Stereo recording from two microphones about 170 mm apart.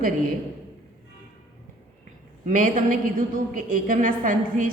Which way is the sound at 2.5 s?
50° right (ahead or behind).